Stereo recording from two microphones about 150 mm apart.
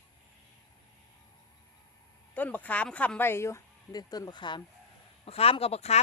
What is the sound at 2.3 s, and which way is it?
Speech, 10° left (ahead or behind).